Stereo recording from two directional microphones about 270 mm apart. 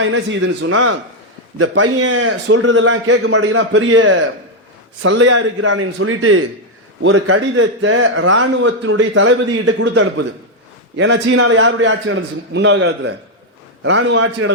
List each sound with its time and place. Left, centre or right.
0.0 s a man's voice: right